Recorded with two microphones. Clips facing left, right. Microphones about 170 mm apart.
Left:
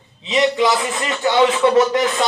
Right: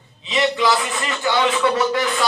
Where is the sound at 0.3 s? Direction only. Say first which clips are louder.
Left 3 dB; 20° left (ahead or behind).